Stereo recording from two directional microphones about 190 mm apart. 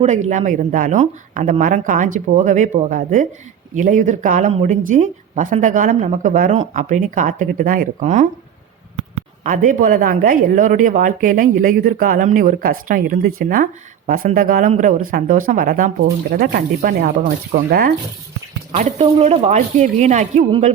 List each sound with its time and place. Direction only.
0.0 s speech: 40° right (ahead or behind)
9.4 s speech: 45° right (ahead or behind)
18.7 s speech: 35° right (ahead or behind)